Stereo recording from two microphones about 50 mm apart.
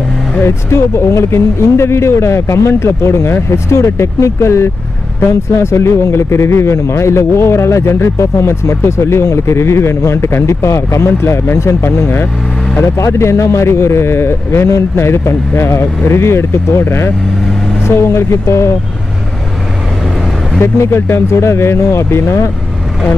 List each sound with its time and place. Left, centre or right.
0.4 s speech: left
17.8 s speech: left
20.6 s speech: left